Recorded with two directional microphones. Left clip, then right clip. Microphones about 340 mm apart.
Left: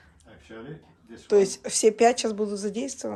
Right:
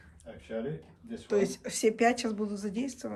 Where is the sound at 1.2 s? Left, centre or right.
Centre.